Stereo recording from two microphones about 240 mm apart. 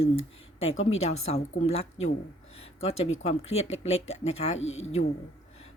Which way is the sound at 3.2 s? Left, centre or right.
Left.